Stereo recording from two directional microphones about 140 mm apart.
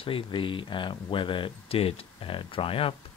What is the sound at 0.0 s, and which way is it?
Speech, 40° left (ahead or behind).